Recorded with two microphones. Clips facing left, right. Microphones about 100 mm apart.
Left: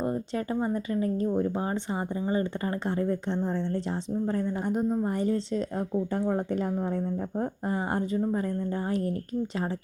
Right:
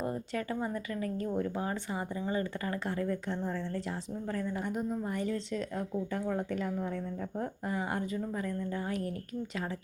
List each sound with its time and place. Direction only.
0.0 s speech: 25° left (ahead or behind)